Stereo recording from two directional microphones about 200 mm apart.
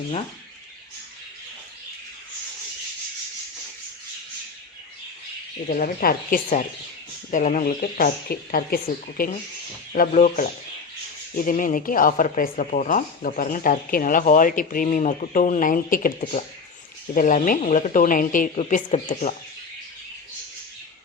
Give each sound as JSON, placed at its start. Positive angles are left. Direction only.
{"t": 5.6, "sound": "speech", "side_deg": 45}
{"t": 11.4, "sound": "speech", "side_deg": 45}
{"t": 17.2, "sound": "a woman's voice", "side_deg": 40}